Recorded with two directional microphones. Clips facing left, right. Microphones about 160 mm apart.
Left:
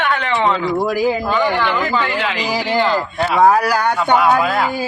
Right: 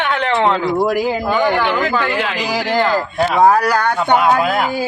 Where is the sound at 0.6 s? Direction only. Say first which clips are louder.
Right 1 dB; 10° right (ahead or behind).